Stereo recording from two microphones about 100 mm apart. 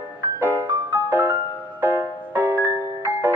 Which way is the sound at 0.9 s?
20° right (ahead or behind).